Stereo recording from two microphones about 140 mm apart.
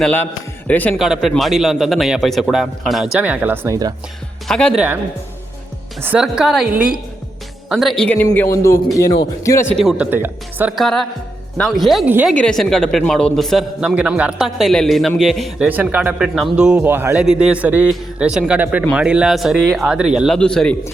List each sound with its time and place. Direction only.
0.7 s speech: 10° left (ahead or behind)
0.9 s a man's voice: centre (ahead or behind)
4.4 s a man's voice: 5° left (ahead or behind)
6.0 s a man's voice: 15° right (ahead or behind); by 8.4 s 10° left (ahead or behind)
8.4 s a man's voice: 20° left (ahead or behind)
9.8 s speech: 10° right (ahead or behind)
10.8 s a man's voice: centre (ahead or behind)
12.0 s speech: 10° right (ahead or behind)
12.3 s a man's voice: 5° left (ahead or behind)